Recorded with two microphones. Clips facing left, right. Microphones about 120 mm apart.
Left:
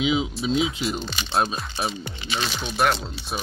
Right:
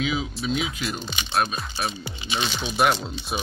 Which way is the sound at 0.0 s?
20° left (ahead or behind).